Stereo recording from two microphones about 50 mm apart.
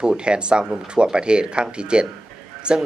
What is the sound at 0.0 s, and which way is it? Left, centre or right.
A man's voice, centre.